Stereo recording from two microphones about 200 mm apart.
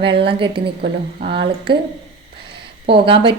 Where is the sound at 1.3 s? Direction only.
55° right (ahead or behind).